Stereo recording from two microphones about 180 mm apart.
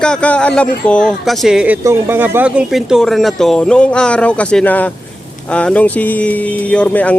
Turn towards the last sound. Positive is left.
turn(degrees=10)  # may be behind; listen again after turning